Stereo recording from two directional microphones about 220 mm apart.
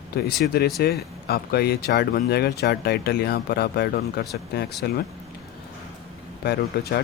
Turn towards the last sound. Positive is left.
turn(degrees=45)  # may be behind; listen again after turning